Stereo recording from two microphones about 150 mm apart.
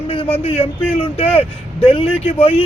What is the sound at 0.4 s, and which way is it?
Speech, 40° left (ahead or behind).